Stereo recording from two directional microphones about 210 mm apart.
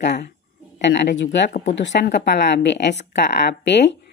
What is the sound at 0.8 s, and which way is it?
Speech, 55° left (ahead or behind).